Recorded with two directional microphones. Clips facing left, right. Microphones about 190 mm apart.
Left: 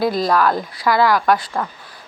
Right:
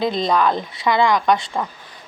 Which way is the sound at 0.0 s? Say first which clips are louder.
Left 1 dB; 5° left (ahead or behind).